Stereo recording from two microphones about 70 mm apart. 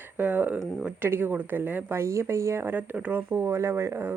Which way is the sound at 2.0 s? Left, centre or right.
Right.